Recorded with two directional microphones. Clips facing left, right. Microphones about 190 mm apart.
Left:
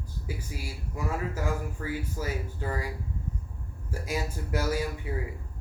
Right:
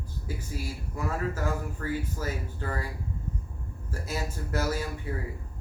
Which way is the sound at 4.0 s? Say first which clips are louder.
Left 1 dB; 10° left (ahead or behind).